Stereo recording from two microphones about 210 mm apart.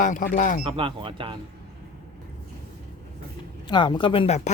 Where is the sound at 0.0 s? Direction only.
40° left (ahead or behind).